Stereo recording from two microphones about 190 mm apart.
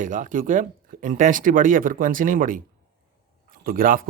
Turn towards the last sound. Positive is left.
turn(degrees=-50)  # may be behind; listen again after turning